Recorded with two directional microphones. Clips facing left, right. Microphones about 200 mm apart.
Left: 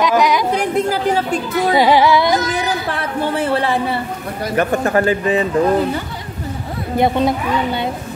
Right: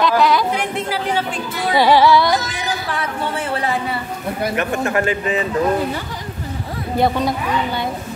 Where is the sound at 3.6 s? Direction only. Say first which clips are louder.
Left 3 dB; 30° left (ahead or behind).